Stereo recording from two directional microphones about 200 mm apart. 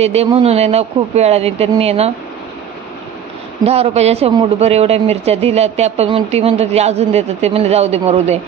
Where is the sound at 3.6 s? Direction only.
30° right (ahead or behind).